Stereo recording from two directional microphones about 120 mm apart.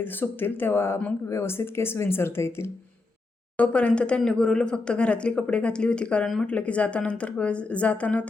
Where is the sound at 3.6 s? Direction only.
10° left (ahead or behind).